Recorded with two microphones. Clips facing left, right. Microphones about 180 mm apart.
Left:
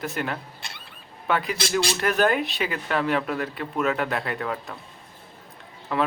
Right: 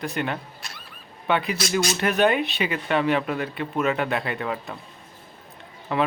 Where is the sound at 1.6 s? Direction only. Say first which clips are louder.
Right 1 dB; 30° left (ahead or behind).